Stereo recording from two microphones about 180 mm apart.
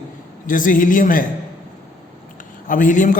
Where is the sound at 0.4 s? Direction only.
50° left (ahead or behind).